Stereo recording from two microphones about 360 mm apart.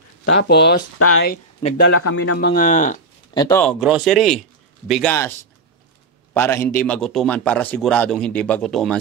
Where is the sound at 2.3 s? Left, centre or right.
Left.